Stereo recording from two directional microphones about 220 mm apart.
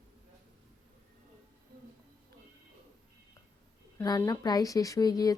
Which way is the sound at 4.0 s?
15° left (ahead or behind).